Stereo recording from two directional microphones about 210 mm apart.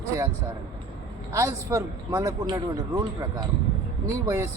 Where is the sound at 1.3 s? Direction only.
15° right (ahead or behind).